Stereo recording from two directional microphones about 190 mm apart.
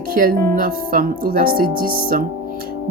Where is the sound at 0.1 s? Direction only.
50° right (ahead or behind).